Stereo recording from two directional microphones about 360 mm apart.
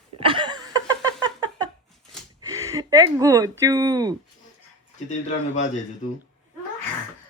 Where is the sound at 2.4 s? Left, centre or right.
Centre.